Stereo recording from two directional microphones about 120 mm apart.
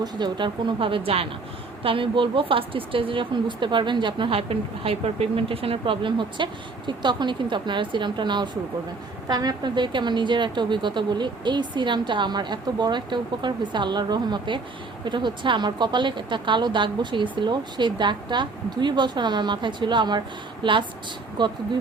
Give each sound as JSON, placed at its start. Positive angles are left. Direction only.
{"t": 0.0, "sound": "a woman's voice", "side_deg": -40}